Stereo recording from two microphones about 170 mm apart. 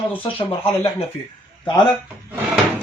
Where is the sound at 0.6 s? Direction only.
15° left (ahead or behind).